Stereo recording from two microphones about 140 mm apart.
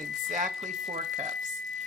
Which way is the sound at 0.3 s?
65° right (ahead or behind).